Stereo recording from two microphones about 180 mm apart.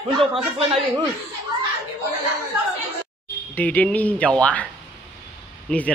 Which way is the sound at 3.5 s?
10° left (ahead or behind).